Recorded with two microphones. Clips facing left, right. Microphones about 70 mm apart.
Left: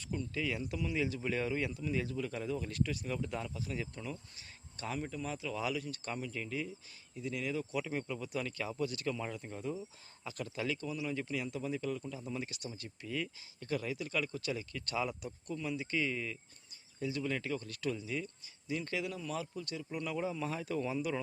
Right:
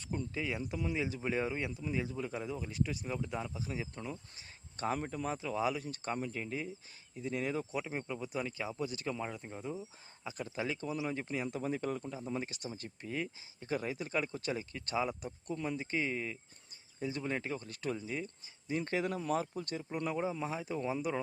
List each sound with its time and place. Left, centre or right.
0.0 s speech: right
4.9 s speech: right
7.6 s speech: right